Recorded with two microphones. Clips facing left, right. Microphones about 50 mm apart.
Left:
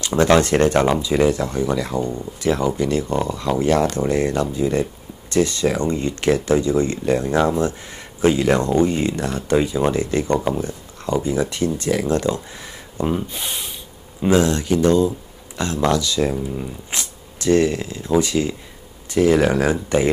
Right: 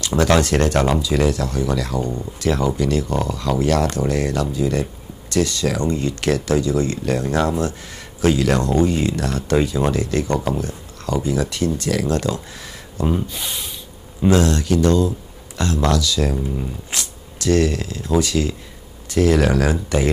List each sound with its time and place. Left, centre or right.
0.0 s speech: left
14.2 s speech: centre